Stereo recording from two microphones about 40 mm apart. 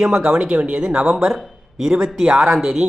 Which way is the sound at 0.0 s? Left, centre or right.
Centre.